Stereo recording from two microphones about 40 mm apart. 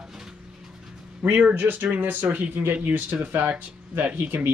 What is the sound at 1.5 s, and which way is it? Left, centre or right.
Speech, right.